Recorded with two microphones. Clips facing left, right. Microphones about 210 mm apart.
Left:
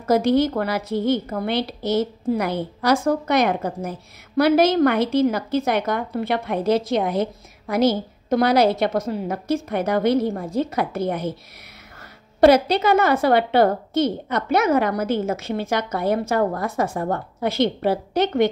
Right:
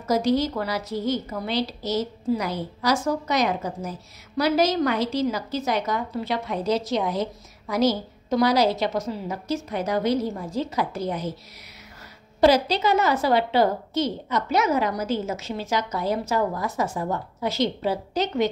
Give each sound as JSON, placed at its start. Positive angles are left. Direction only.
{"t": 0.0, "sound": "a woman's voice", "side_deg": 55}
{"t": 12.4, "sound": "a woman's voice", "side_deg": 55}